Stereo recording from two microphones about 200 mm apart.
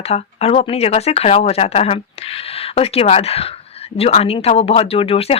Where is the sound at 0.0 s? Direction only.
30° left (ahead or behind).